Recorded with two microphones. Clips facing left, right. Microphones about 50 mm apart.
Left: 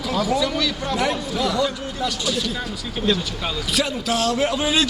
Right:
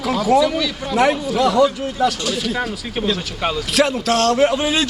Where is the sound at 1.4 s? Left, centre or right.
Right.